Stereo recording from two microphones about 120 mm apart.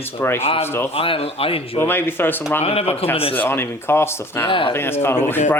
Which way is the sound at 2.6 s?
60° left (ahead or behind).